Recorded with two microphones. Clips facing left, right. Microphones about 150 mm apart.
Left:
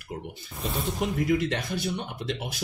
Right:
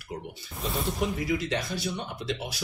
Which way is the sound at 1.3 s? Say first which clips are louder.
Left 3 dB; 50° left (ahead or behind).